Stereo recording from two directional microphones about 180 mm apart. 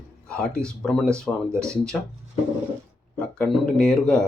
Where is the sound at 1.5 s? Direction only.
15° right (ahead or behind).